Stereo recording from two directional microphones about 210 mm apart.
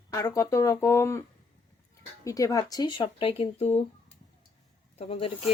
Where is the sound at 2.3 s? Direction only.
15° left (ahead or behind).